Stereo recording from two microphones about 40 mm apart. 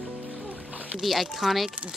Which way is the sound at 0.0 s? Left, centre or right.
Right.